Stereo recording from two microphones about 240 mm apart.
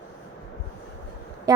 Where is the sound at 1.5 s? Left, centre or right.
Centre.